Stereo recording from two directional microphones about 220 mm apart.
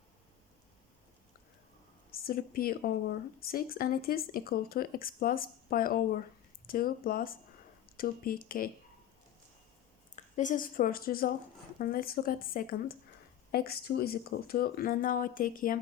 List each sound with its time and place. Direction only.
2.0 s speech: 45° left (ahead or behind)
10.2 s speech: 35° left (ahead or behind)